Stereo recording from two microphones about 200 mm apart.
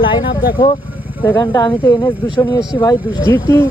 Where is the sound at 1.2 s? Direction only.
15° left (ahead or behind).